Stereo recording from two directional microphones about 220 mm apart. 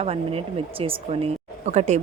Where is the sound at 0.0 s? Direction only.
25° right (ahead or behind).